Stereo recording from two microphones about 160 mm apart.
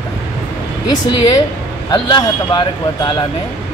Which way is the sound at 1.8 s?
30° left (ahead or behind).